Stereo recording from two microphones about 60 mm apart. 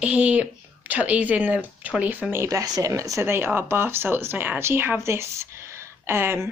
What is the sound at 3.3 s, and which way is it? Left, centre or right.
Speech, right.